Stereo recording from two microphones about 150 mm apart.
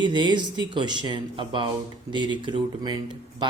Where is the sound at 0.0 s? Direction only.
30° right (ahead or behind).